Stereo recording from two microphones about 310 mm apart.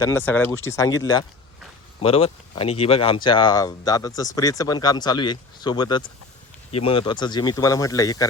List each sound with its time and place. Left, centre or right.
0.0 s speech: centre